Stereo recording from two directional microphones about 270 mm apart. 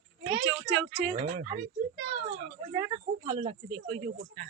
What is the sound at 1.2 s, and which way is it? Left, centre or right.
Speech, right.